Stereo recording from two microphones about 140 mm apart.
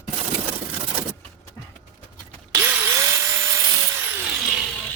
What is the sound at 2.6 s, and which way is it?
Tools, 20° right (ahead or behind).